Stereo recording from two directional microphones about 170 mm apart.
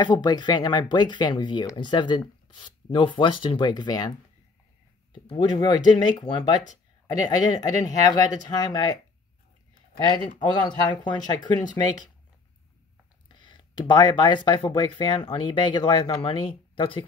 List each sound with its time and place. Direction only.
0.0 s speech: 25° left (ahead or behind)
5.3 s speech: 25° left (ahead or behind)
10.8 s speech: 25° left (ahead or behind)
13.3 s speech: 25° left (ahead or behind)